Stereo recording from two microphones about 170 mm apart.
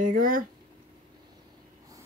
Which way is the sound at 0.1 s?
55° right (ahead or behind).